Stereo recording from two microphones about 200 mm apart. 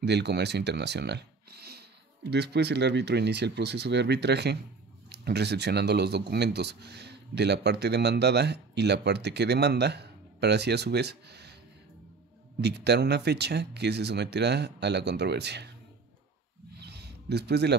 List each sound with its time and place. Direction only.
0.0 s speech: 55° right (ahead or behind)
12.5 s speech: 60° right (ahead or behind)
16.7 s a sound: 55° right (ahead or behind)